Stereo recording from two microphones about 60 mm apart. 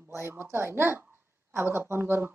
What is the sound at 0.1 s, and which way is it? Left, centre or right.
Speech, right.